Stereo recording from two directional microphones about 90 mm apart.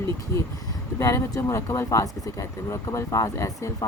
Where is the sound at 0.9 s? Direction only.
35° left (ahead or behind).